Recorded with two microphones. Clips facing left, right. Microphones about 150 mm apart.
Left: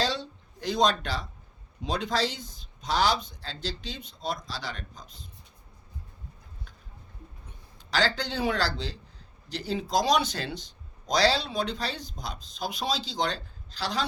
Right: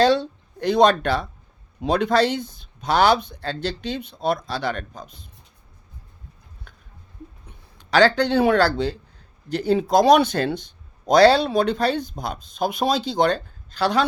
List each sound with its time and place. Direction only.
0.0 s speech: 60° right (ahead or behind)
7.8 s speech: 65° right (ahead or behind)